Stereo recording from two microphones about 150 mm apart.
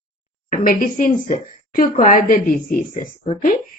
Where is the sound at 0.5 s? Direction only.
65° left (ahead or behind).